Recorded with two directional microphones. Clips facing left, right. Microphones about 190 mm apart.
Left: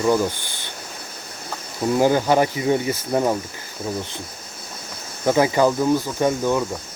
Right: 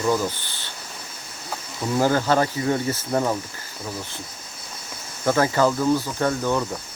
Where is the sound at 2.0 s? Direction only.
15° left (ahead or behind).